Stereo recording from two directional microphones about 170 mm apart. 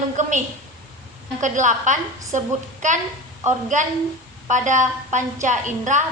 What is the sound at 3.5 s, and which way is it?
A woman's voice, 45° right (ahead or behind).